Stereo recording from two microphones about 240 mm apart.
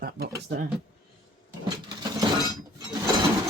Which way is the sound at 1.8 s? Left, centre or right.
Centre.